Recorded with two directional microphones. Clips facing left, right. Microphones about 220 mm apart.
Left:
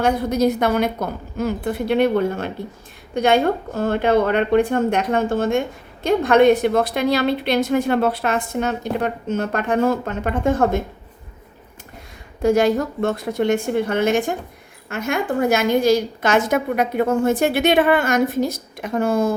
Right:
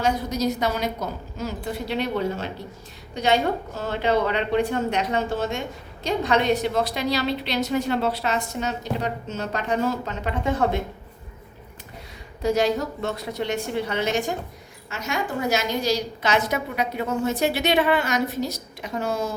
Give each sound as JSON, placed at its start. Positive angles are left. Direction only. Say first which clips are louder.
{"t": 0.0, "sound": "a woman's voice", "louder": "left 6 dB", "side_deg": 55}
{"t": 12.4, "sound": "a woman's voice", "louder": "left 5 dB", "side_deg": 50}